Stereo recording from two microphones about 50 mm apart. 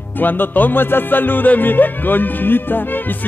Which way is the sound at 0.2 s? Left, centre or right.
Left.